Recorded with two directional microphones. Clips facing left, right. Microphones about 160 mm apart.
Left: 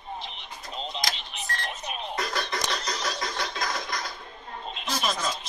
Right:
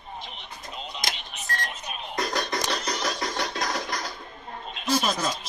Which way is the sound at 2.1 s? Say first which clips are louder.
Right 4 dB; 40° right (ahead or behind).